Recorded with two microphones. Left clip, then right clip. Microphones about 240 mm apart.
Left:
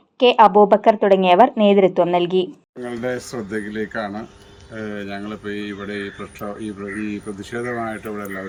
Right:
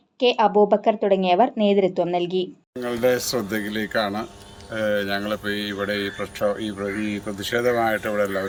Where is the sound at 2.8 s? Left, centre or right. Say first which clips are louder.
Right 5 dB; centre.